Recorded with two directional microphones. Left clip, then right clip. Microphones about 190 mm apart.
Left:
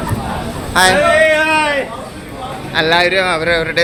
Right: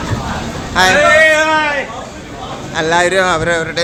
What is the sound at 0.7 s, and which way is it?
Speech, 10° left (ahead or behind).